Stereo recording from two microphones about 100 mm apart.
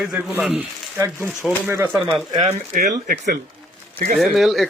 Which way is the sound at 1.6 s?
20° right (ahead or behind).